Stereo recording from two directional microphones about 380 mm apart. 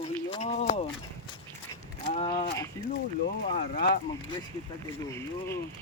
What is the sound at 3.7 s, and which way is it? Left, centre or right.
Speech, left.